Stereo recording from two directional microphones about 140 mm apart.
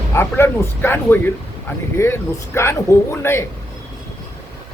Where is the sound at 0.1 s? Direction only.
15° left (ahead or behind).